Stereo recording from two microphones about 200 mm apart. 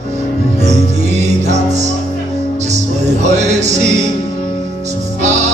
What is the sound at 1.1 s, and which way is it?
Music, 35° right (ahead or behind).